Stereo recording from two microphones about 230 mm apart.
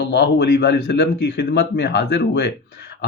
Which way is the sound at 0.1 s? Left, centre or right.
Left.